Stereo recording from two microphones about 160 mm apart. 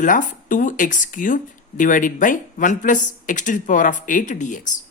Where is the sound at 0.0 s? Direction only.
55° left (ahead or behind).